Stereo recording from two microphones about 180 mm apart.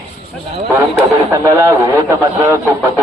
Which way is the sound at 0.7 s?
15° right (ahead or behind).